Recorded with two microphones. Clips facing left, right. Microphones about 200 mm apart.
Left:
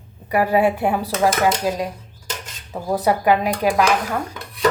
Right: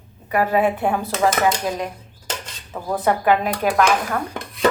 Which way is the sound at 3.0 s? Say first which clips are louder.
Even; 10° left (ahead or behind).